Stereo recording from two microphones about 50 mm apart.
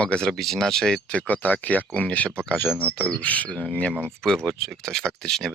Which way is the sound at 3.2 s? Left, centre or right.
Left.